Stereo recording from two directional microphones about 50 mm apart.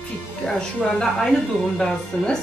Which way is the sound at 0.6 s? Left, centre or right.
Centre.